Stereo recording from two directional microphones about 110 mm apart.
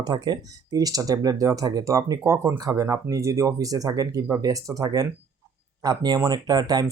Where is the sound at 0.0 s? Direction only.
40° right (ahead or behind).